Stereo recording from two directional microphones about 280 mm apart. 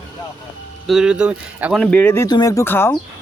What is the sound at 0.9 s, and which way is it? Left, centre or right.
Speech, centre.